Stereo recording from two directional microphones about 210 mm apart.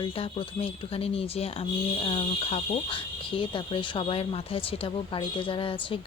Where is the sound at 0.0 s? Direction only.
25° left (ahead or behind).